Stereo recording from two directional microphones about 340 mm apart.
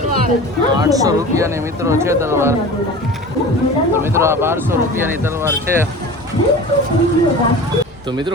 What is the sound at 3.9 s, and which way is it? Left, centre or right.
Speech, centre.